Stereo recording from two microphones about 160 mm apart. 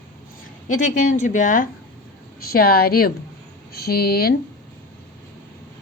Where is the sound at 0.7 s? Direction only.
50° left (ahead or behind).